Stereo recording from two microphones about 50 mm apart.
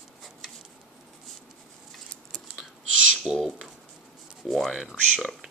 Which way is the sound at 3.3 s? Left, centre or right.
Right.